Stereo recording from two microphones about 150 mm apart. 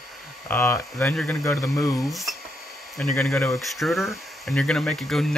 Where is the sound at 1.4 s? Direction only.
20° left (ahead or behind).